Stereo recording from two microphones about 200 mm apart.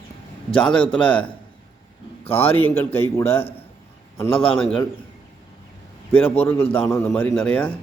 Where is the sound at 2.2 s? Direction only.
30° left (ahead or behind).